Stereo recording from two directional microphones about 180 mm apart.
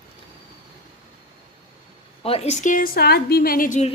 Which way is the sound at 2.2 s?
35° left (ahead or behind).